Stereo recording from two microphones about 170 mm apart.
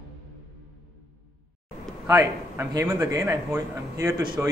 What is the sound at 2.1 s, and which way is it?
A man's voice, 20° right (ahead or behind).